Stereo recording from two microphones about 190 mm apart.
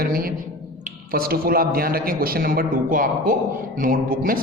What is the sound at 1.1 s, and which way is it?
A man's voice, 50° right (ahead or behind).